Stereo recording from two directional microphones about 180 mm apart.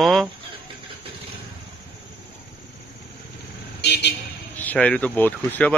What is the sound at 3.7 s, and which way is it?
Vehicle, 70° left (ahead or behind).